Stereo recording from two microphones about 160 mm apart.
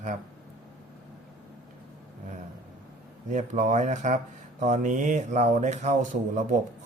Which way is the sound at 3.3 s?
50° right (ahead or behind).